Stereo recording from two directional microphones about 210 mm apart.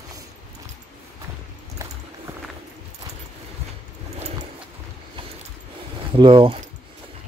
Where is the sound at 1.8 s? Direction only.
15° right (ahead or behind).